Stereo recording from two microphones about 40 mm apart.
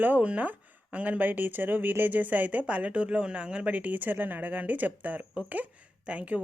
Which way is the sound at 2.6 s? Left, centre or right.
Right.